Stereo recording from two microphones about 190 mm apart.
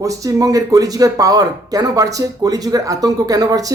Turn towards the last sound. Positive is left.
turn(degrees=-20)  # may be behind; listen again after turning